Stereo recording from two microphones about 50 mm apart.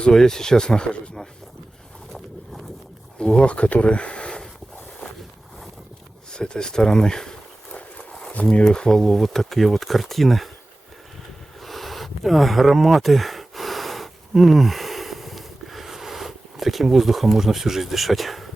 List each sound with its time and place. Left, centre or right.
0.0 s speech: centre
3.2 s speech: left
6.3 s speech: centre
7.7 s horse: left
8.6 s speech: centre
11.6 s a sound: centre